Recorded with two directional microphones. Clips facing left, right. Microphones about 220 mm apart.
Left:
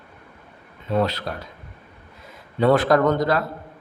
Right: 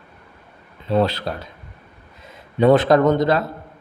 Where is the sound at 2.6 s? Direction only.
20° right (ahead or behind).